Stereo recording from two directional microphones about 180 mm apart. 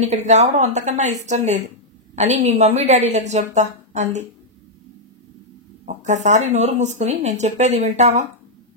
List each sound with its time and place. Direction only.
0.0 s speech: 40° right (ahead or behind)
5.9 s speech: 40° right (ahead or behind)